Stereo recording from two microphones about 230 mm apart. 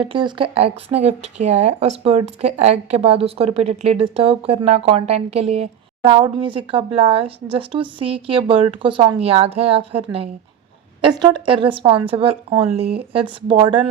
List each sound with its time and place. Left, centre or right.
0.0 s speech: right